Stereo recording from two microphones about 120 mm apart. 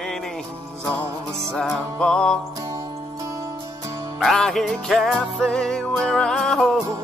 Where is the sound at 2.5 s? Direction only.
30° right (ahead or behind).